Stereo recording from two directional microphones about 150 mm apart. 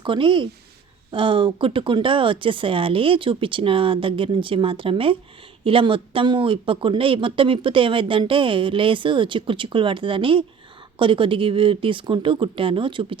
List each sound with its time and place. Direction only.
0.0 s speech: 35° right (ahead or behind)